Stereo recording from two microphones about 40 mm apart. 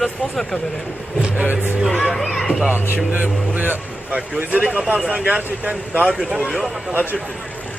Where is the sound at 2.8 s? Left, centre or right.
Right.